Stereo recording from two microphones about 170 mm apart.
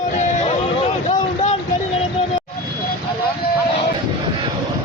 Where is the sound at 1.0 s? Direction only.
40° left (ahead or behind).